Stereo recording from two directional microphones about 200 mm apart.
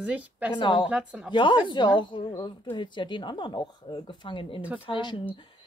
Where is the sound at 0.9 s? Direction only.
5° right (ahead or behind).